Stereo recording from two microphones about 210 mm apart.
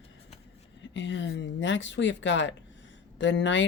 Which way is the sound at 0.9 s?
60° left (ahead or behind).